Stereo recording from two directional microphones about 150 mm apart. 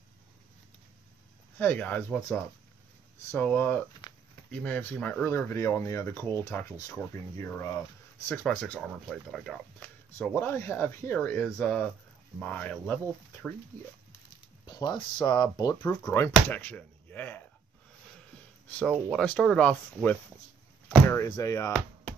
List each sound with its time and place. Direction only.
1.6 s speech: 10° left (ahead or behind)
4.0 s a sound: 30° left (ahead or behind)
4.5 s speech: 10° left (ahead or behind)
9.8 s speech: 15° left (ahead or behind)
14.7 s speech: 30° left (ahead or behind)
15.9 s speech: 15° left (ahead or behind)
18.7 s speech: 10° left (ahead or behind)